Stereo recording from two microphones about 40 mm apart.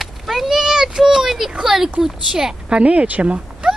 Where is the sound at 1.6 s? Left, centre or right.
Centre.